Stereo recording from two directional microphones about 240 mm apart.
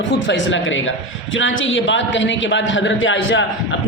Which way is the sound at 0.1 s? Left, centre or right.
Left.